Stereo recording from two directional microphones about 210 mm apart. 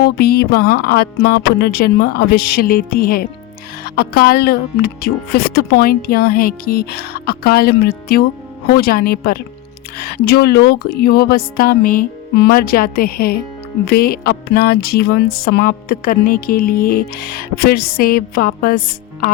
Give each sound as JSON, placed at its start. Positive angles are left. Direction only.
{"t": 0.0, "sound": "music", "side_deg": 45}